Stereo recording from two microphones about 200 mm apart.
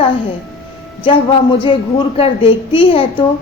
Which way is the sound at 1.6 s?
25° left (ahead or behind).